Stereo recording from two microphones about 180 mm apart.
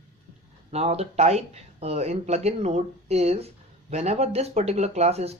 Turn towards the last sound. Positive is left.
turn(degrees=-35)  # may be behind; listen again after turning